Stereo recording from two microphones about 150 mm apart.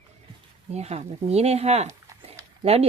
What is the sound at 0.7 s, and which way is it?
Speech, 45° right (ahead or behind).